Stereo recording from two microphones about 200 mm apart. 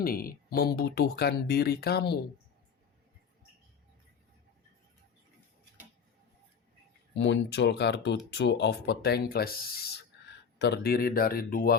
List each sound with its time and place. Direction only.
0.0 s speech: 45° left (ahead or behind)
7.2 s speech: 60° left (ahead or behind)